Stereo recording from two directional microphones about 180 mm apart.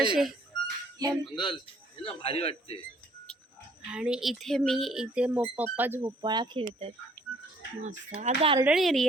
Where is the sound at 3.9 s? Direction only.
5° right (ahead or behind).